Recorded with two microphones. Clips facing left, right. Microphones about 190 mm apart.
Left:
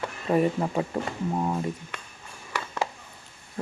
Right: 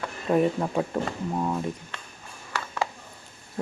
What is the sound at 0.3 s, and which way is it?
Speech, centre (ahead or behind).